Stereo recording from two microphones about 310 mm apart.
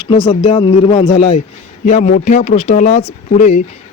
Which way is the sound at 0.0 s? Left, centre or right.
Centre.